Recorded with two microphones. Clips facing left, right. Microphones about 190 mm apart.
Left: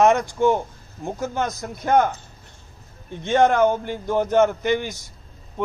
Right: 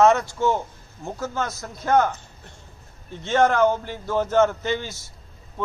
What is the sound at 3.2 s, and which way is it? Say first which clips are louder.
A man's voice: left 2 dB; 15° left (ahead or behind).